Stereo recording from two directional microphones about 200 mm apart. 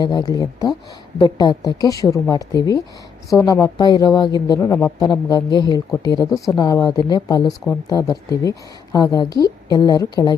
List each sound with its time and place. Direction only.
0.0 s speech: 20° left (ahead or behind)